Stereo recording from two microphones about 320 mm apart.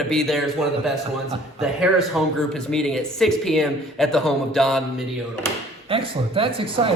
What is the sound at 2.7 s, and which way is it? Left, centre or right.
Speech, centre.